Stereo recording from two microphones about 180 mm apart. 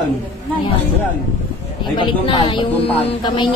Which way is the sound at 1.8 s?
25° left (ahead or behind).